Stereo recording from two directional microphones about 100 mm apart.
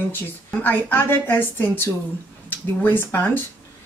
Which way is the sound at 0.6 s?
20° left (ahead or behind).